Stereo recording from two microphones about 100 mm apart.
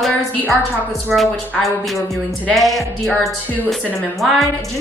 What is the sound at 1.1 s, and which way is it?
A woman's voice, centre (ahead or behind).